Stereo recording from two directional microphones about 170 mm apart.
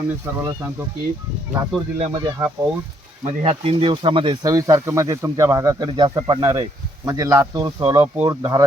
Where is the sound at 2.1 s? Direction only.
25° right (ahead or behind).